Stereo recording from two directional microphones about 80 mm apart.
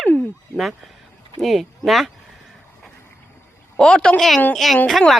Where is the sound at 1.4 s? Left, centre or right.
Centre.